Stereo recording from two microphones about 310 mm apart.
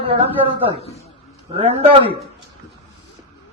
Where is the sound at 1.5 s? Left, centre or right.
Centre.